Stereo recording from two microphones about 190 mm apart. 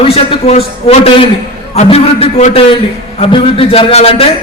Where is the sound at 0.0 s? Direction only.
30° left (ahead or behind).